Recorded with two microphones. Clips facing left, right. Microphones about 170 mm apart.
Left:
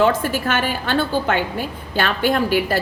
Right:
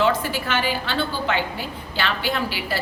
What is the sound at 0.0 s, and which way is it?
A woman's voice, 50° left (ahead or behind).